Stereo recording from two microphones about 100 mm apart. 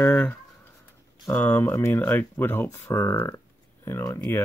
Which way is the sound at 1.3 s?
20° left (ahead or behind).